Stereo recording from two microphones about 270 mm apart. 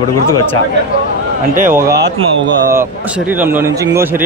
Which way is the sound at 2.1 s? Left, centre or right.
Centre.